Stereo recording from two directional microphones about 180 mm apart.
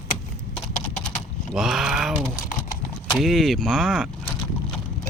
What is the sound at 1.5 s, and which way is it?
Speech, centre (ahead or behind).